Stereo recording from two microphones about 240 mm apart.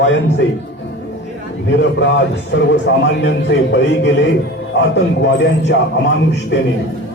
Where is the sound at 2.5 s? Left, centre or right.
Left.